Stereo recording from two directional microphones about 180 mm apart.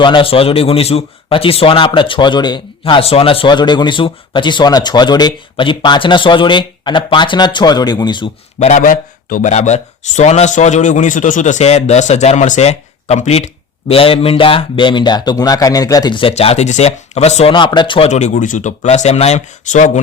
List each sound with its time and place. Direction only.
0.0 s speech: 30° left (ahead or behind)
8.5 s speech: 40° left (ahead or behind)